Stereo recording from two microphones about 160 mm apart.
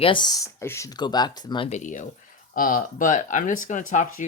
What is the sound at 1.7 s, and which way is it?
Speech, 50° left (ahead or behind).